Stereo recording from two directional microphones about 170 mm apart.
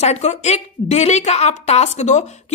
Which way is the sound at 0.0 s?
40° left (ahead or behind).